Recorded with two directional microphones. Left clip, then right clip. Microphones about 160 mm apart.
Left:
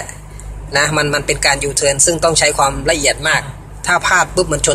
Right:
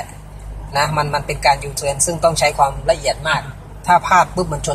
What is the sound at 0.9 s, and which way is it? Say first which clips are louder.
Speech: left 4 dB; 15° left (ahead or behind).